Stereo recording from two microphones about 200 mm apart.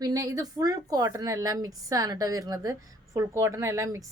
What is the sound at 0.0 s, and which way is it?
A woman's voice, 15° right (ahead or behind).